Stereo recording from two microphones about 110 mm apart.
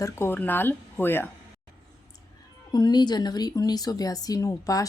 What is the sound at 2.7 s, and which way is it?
Speech, 40° left (ahead or behind).